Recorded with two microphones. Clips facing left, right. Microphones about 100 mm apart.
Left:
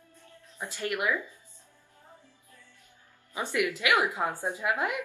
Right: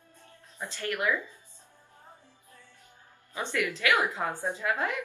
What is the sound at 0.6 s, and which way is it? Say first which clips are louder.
Speech: even; 15° left (ahead or behind).